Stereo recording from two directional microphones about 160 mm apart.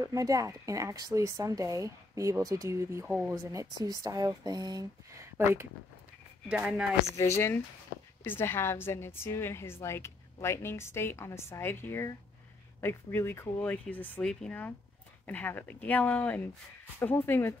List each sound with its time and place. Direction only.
0.0 s a woman's voice: 20° right (ahead or behind)
7.2 s a woman's voice: 15° left (ahead or behind)
12.8 s a woman's voice: 15° left (ahead or behind)